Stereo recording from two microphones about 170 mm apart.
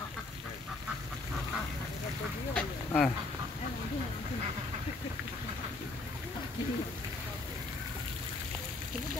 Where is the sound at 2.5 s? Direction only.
5° left (ahead or behind).